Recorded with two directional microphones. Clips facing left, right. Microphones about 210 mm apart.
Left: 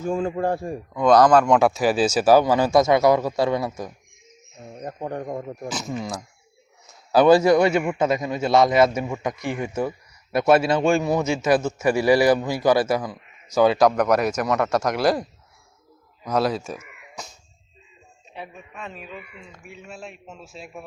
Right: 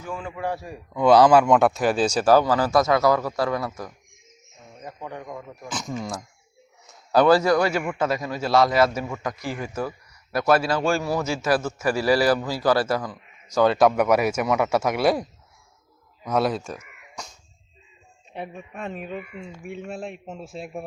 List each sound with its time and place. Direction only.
0.3 s a man's voice: 50° left (ahead or behind)
0.9 s a man's voice: 5° right (ahead or behind); by 3.9 s 20° left (ahead or behind)
5.2 s speech: 35° left (ahead or behind)
5.6 s speech: 10° left (ahead or behind)
6.8 s a sound: centre (ahead or behind)
7.3 s a man's voice: 25° left (ahead or behind); by 17.3 s 5° left (ahead or behind)
18.3 s speech: 50° right (ahead or behind)